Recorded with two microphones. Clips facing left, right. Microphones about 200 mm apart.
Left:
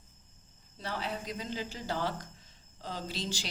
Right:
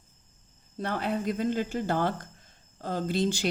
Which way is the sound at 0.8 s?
55° right (ahead or behind).